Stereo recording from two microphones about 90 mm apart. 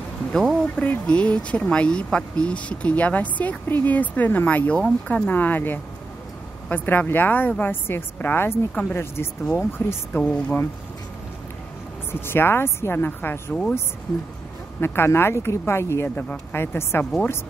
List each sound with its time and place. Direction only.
0.3 s a woman's voice: 5° left (ahead or behind); by 10.2 s 25° left (ahead or behind)
12.1 s a woman's voice: 25° left (ahead or behind)
14.8 s a woman's voice: 25° left (ahead or behind)
17.0 s speech: 10° left (ahead or behind)